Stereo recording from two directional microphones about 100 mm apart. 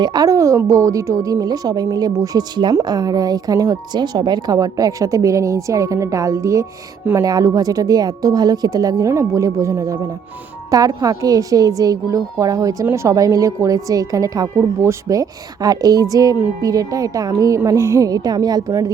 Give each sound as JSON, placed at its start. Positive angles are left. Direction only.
{"t": 0.0, "sound": "a woman's voice", "side_deg": -40}